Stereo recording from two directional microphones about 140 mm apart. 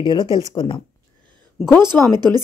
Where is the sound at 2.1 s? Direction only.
30° right (ahead or behind).